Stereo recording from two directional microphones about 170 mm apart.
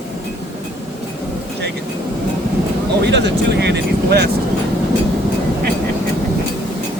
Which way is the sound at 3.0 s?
90° right.